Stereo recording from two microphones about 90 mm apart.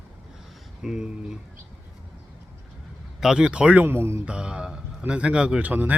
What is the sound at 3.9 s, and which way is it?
Speech, 30° right (ahead or behind).